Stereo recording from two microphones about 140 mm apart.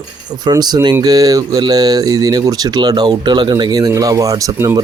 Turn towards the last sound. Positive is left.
turn(degrees=-25)  # may be behind; listen again after turning